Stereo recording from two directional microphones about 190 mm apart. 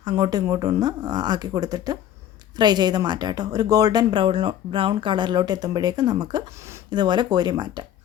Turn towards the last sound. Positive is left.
turn(degrees=-25)  # may be behind; listen again after turning